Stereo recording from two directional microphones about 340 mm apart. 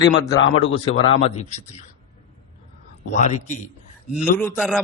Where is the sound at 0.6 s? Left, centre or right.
Centre.